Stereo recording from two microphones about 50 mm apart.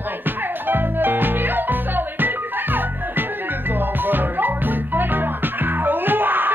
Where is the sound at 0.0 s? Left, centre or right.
Right.